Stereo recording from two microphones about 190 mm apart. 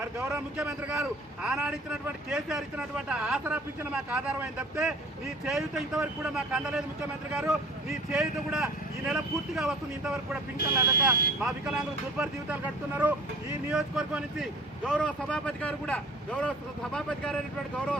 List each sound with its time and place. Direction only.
0.3 s speech: 15° right (ahead or behind)
1.0 s speech: centre (ahead or behind)
10.6 s speech: 55° left (ahead or behind)
11.3 s speech: 5° right (ahead or behind)